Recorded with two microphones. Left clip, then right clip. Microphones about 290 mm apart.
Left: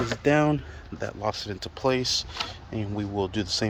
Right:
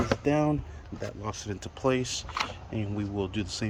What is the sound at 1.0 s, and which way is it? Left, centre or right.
Speech, centre.